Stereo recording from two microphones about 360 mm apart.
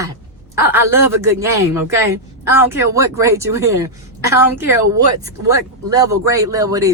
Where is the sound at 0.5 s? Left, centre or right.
Centre.